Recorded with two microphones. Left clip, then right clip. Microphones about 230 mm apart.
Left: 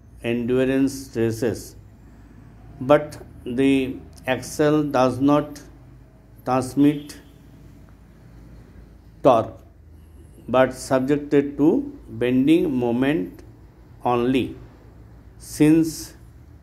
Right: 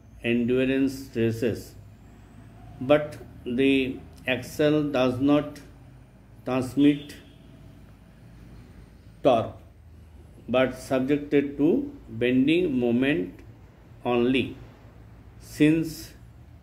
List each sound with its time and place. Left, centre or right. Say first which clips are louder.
0.2 s speech: left 3 dB; left
2.9 s speech: left 4 dB; left
9.2 s a man's voice: left 5 dB; left
10.5 s speech: left 5 dB; left
15.4 s speech: left 5 dB; left